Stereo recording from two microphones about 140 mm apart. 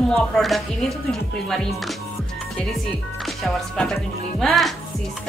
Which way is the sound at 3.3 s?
5° left (ahead or behind).